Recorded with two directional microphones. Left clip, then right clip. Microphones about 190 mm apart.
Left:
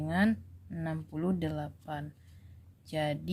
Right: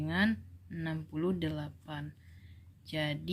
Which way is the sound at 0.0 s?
55° left (ahead or behind).